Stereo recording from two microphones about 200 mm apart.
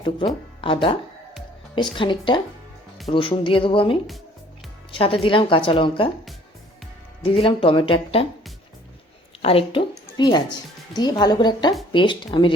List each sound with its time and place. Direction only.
0.6 s speech: 25° left (ahead or behind)
7.3 s speech: 25° left (ahead or behind)
9.4 s speech: 30° left (ahead or behind)